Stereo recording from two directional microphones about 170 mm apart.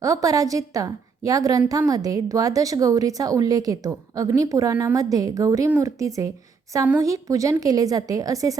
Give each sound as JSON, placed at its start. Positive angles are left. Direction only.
{"t": 0.0, "sound": "a woman's voice", "side_deg": -20}